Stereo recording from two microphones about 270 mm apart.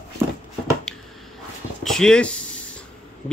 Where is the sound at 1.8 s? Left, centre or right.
Centre.